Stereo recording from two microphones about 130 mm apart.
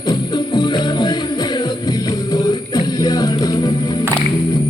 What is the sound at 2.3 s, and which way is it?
Music, 30° left (ahead or behind).